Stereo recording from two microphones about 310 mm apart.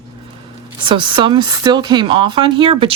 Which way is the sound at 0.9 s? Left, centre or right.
Centre.